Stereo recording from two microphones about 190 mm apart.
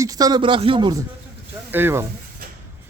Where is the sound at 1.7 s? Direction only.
10° right (ahead or behind).